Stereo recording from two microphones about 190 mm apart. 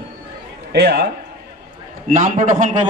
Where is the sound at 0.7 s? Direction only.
60° right (ahead or behind).